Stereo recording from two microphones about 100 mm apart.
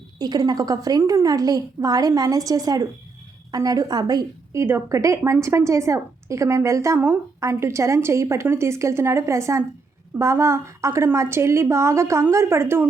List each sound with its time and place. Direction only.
0.2 s a woman's voice: 40° right (ahead or behind)
4.6 s a woman's voice: 30° right (ahead or behind)